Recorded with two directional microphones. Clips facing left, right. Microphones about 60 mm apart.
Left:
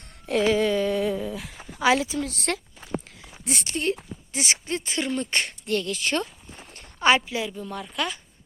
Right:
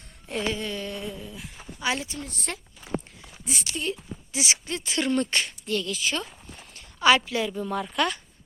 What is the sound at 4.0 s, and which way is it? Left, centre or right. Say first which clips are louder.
Speech: even; left.